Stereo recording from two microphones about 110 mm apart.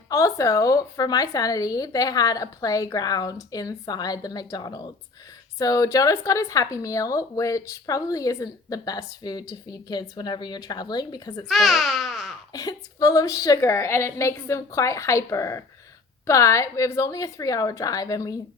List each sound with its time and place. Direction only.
0.1 s speech: 30° left (ahead or behind)
11.4 s babbling: centre (ahead or behind)
12.5 s a woman's voice: 35° left (ahead or behind)